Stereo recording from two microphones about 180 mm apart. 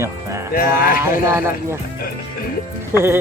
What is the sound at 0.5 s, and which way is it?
Speech, 50° left (ahead or behind).